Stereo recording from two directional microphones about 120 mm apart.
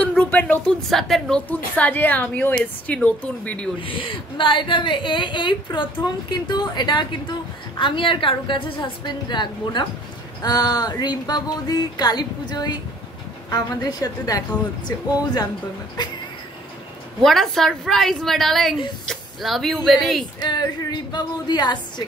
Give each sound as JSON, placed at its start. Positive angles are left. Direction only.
{"t": 0.2, "sound": "a woman's voice", "side_deg": 15}
{"t": 1.5, "sound": "a woman's voice", "side_deg": 15}
{"t": 3.8, "sound": "a woman's voice", "side_deg": 45}
{"t": 17.2, "sound": "a woman's voice", "side_deg": 0}
{"t": 20.3, "sound": "a woman's voice", "side_deg": 35}